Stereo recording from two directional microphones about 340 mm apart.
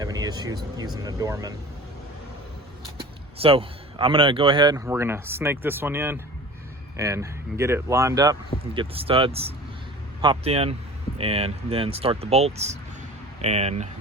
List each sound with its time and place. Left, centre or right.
0.0 s speech: centre
3.0 s speech: centre